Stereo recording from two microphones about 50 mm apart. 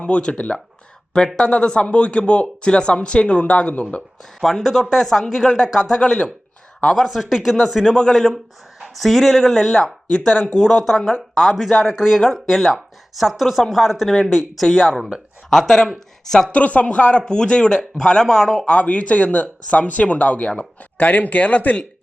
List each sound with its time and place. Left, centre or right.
0.0 s speech: left
4.4 s speech: centre
5.8 s speech: centre
6.9 s speech: centre
10.1 s speech: centre
15.4 s speech: centre
16.5 s speech: left; by 18.6 s centre
18.6 s speech: left